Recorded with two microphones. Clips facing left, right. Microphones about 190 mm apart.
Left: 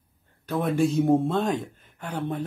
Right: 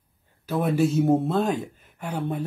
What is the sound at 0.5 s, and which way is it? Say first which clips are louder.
Speech: right 1 dB; 5° right (ahead or behind).